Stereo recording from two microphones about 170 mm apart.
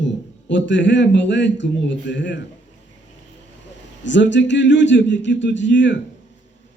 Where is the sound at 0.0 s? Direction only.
90° left.